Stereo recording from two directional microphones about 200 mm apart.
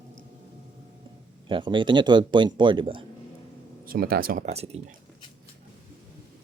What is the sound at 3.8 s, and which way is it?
Speech, 45° right (ahead or behind).